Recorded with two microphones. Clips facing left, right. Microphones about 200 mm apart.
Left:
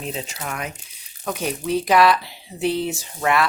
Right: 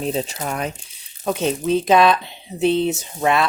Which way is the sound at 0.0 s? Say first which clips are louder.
Right 7 dB; 35° right (ahead or behind).